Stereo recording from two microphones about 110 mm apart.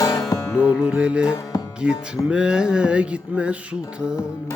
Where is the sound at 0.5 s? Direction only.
10° right (ahead or behind).